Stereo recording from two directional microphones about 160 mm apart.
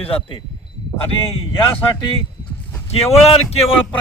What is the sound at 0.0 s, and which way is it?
Speech, 35° left (ahead or behind).